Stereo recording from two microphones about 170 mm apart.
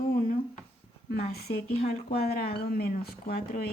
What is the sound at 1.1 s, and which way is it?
A woman's voice, 65° left (ahead or behind).